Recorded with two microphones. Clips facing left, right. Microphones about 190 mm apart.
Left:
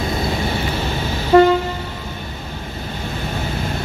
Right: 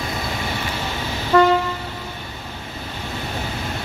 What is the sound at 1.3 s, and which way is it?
Train, 20° left (ahead or behind).